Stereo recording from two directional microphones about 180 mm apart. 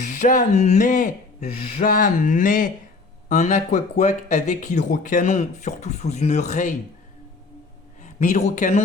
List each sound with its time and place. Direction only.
0.0 s speech: 45° left (ahead or behind)
8.0 s speech: 40° left (ahead or behind)